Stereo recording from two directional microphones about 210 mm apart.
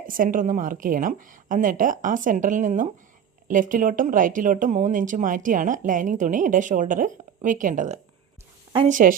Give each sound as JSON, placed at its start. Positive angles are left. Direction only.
{"t": 0.1, "sound": "speech", "side_deg": -40}